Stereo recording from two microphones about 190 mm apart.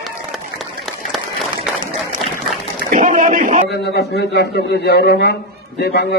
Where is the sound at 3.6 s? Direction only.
60° left (ahead or behind).